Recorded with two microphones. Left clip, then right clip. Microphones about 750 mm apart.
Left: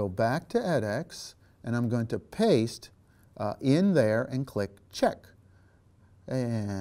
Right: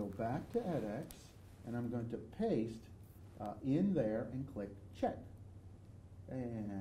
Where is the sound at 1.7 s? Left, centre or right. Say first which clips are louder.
Left 12 dB; left.